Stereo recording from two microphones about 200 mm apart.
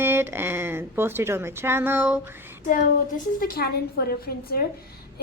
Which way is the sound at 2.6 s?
40° left (ahead or behind).